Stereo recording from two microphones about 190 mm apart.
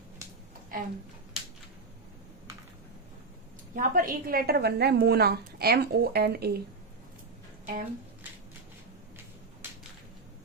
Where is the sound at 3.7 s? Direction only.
50° right (ahead or behind).